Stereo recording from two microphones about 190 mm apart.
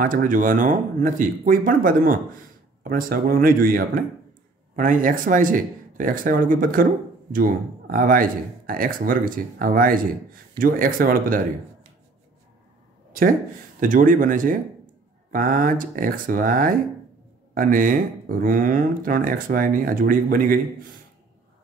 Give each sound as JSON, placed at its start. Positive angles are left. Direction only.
{"t": 0.0, "sound": "speech", "side_deg": -45}
{"t": 13.1, "sound": "speech", "side_deg": -45}